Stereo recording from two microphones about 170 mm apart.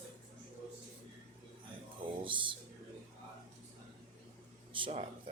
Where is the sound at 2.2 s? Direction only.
30° right (ahead or behind).